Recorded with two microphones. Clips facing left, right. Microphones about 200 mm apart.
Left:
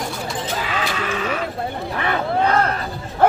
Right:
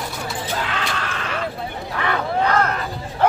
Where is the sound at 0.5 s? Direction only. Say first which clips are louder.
Left 2 dB; 5° left (ahead or behind).